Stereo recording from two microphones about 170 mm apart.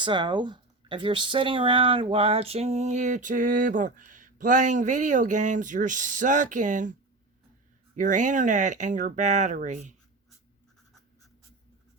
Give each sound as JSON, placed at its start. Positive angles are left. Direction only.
{"t": 0.0, "sound": "speech", "side_deg": -30}
{"t": 7.9, "sound": "speech", "side_deg": -50}